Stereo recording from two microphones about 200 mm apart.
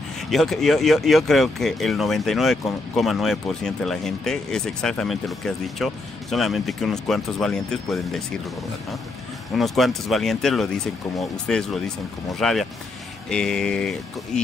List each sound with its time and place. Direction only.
0.3 s speech: centre (ahead or behind)
9.6 s speech: centre (ahead or behind)